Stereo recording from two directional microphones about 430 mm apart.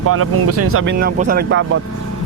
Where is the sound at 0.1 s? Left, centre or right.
Right.